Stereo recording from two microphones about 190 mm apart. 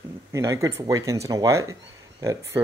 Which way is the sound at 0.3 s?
15° right (ahead or behind).